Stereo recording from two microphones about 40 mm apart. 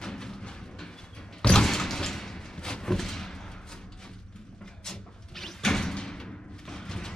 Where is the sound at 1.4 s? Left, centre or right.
Centre.